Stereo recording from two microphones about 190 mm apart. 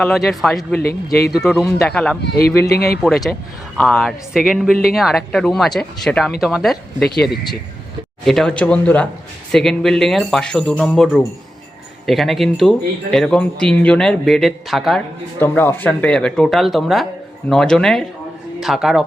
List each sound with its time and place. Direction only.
0.0 s speech: centre (ahead or behind)
2.3 s speech: 15° left (ahead or behind)
2.6 s speech: 55° left (ahead or behind)
3.0 s speech: centre (ahead or behind)
8.2 s speech: centre (ahead or behind)
15.4 s speech: 10° left (ahead or behind)